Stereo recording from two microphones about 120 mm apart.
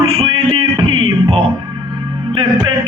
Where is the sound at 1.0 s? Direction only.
50° right (ahead or behind).